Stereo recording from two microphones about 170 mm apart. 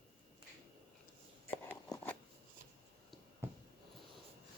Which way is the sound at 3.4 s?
15° right (ahead or behind).